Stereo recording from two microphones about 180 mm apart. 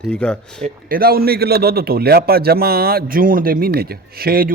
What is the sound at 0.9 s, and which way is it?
A man's voice, 55° right (ahead or behind).